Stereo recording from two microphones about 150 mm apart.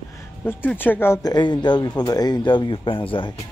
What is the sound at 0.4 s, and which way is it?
Speech, 10° left (ahead or behind).